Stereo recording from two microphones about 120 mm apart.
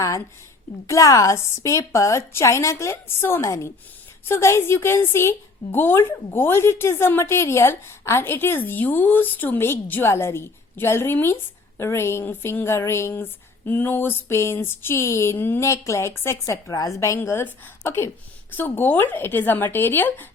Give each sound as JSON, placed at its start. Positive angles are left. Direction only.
{"t": 0.9, "sound": "a woman's voice", "side_deg": 25}
{"t": 17.2, "sound": "a woman's voice", "side_deg": 20}